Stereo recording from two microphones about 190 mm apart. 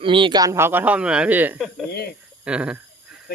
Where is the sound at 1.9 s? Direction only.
55° left (ahead or behind).